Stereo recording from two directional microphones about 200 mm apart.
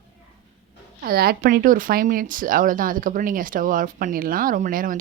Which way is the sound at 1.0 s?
50° right (ahead or behind).